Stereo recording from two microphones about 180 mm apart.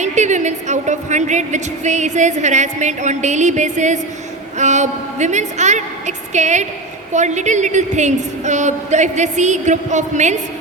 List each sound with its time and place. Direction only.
0.0 s a woman's voice: 40° right (ahead or behind)